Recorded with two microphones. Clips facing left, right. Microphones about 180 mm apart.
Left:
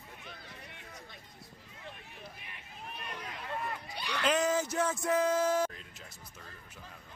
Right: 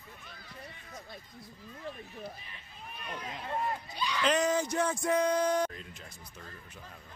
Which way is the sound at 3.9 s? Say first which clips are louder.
Right 3 dB; 65° left (ahead or behind).